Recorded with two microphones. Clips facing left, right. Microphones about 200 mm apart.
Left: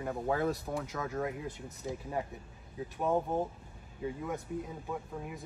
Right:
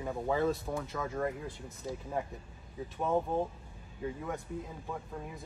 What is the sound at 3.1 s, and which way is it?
Speech, 15° left (ahead or behind).